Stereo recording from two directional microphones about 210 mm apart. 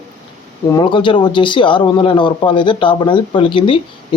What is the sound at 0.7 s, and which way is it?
Speech, 20° left (ahead or behind).